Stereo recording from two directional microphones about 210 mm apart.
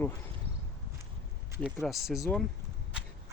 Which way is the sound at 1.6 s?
Centre (ahead or behind).